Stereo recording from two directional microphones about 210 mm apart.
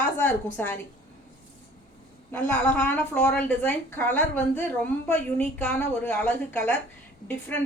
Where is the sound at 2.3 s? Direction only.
10° left (ahead or behind).